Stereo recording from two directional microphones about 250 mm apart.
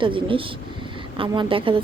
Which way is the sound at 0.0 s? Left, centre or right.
Right.